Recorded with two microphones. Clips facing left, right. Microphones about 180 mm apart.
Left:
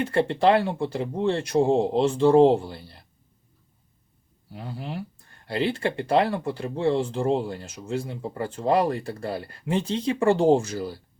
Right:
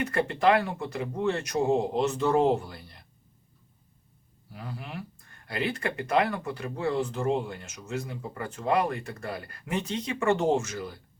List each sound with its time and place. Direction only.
0.0 s speech: 30° left (ahead or behind)
4.5 s speech: 30° left (ahead or behind)